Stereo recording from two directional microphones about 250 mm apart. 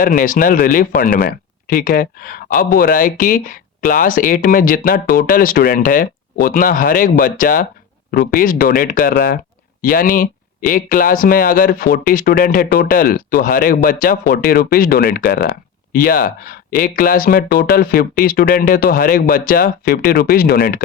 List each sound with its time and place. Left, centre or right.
0.2 s speech: left